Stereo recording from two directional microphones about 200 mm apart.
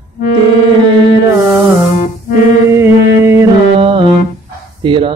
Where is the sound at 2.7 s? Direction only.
15° right (ahead or behind).